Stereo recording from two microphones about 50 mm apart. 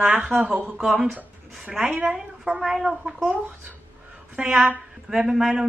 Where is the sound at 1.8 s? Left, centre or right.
Centre.